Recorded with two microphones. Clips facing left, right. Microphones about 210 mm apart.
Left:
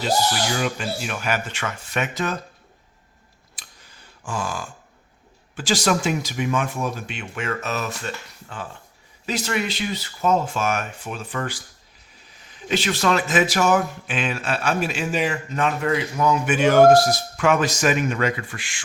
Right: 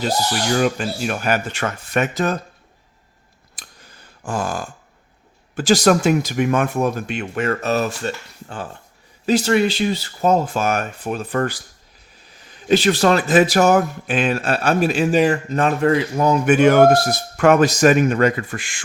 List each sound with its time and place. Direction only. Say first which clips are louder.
0.5 s speech: right 6 dB; 45° right (ahead or behind)
4.2 s speech: right 5 dB; 45° right (ahead or behind)
12.6 s speech: right 6 dB; 35° right (ahead or behind)
16.6 s speech: left 1 dB; 55° right (ahead or behind)